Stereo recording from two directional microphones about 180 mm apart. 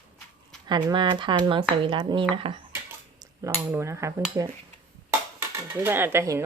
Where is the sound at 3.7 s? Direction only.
15° right (ahead or behind).